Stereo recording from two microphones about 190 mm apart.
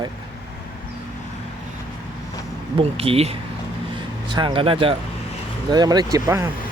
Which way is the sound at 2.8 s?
30° right (ahead or behind).